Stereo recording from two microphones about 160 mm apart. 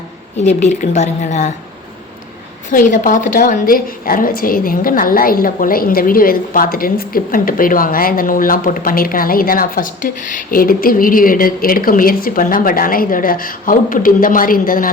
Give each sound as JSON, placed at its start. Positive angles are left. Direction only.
{"t": 0.3, "sound": "a woman's voice", "side_deg": 45}
{"t": 2.6, "sound": "a woman's voice", "side_deg": 55}